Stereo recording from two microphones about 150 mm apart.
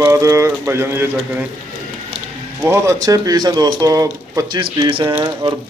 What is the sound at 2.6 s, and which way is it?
Speech, 20° right (ahead or behind).